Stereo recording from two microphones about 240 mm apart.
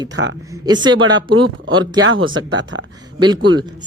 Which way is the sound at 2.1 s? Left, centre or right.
Right.